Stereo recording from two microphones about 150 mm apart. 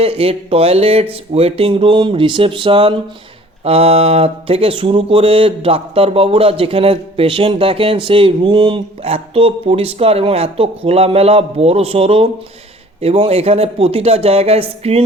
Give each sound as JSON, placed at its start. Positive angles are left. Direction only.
{"t": 0.0, "sound": "speech", "side_deg": -40}